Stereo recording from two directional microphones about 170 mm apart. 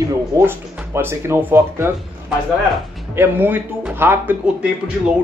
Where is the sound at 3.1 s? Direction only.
10° right (ahead or behind).